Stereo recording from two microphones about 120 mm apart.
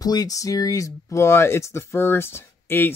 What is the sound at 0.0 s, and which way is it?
Speech, 30° left (ahead or behind).